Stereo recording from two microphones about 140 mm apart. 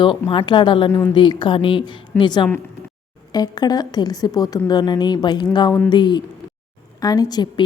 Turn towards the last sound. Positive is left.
turn(degrees=30)  # may be behind; listen again after turning